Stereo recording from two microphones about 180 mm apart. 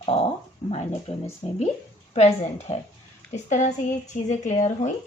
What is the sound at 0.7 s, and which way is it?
Speech, 35° left (ahead or behind).